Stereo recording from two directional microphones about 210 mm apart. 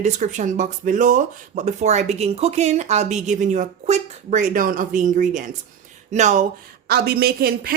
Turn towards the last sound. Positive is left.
turn(degrees=-45)  # may be behind; listen again after turning